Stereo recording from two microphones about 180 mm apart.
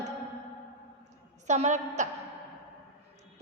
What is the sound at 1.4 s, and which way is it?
Speech, 40° right (ahead or behind).